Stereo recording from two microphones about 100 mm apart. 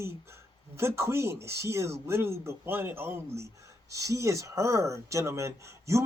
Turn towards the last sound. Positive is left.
turn(degrees=-30)  # may be behind; listen again after turning